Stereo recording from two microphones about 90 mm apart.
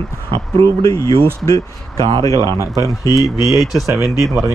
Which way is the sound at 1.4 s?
40° left (ahead or behind).